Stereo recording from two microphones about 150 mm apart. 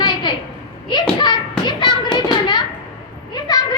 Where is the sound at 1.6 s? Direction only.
30° left (ahead or behind).